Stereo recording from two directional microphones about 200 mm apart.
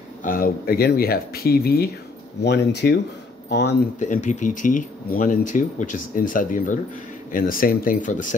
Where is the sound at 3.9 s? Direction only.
40° left (ahead or behind).